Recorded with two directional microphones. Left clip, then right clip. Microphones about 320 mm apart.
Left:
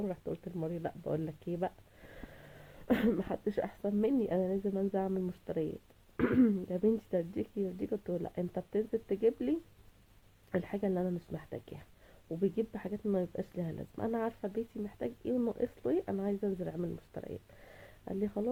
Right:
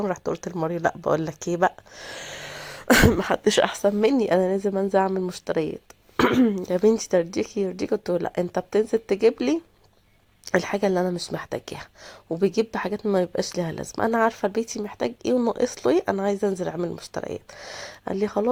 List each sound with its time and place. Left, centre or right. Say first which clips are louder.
0.0 s a woman's voice: right 13 dB; centre